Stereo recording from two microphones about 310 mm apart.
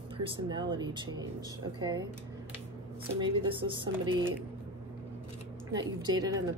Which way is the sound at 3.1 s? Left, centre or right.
Centre.